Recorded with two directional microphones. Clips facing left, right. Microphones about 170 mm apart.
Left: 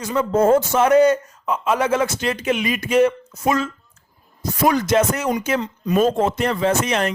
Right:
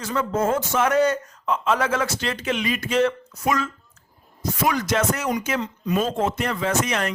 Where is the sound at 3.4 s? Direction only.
25° left (ahead or behind).